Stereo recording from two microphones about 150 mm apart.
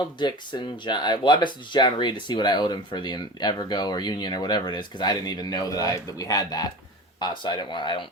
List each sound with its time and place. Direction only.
0.0 s speech: 30° left (ahead or behind)